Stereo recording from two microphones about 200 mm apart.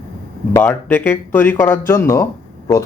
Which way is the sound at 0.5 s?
10° left (ahead or behind).